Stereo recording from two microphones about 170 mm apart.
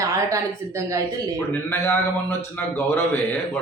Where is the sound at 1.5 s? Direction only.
15° left (ahead or behind).